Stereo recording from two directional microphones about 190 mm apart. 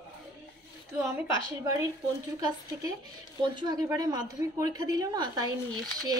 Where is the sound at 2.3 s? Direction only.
20° right (ahead or behind).